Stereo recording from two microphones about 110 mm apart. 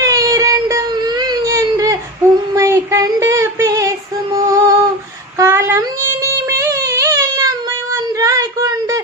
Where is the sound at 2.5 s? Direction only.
30° right (ahead or behind).